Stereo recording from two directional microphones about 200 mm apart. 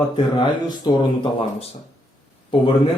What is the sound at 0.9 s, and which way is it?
Speech, 25° left (ahead or behind).